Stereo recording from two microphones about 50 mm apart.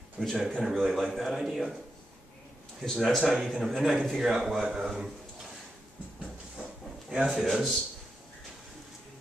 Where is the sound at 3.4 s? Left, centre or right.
Centre.